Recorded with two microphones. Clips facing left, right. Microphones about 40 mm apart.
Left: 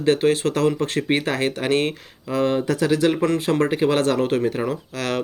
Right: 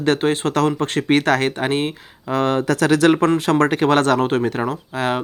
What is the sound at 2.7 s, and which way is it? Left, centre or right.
Speech, right.